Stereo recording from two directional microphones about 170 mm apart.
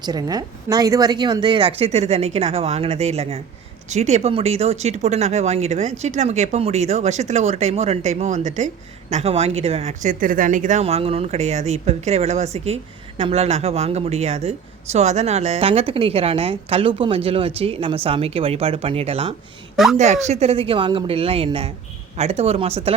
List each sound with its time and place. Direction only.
0.0 s speech: 25° right (ahead or behind)
19.7 s a woman's voice: centre (ahead or behind)
20.0 s speech: 40° right (ahead or behind)